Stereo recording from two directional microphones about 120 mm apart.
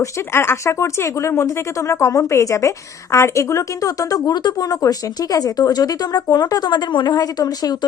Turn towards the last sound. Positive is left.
turn(degrees=30)  # may be behind; listen again after turning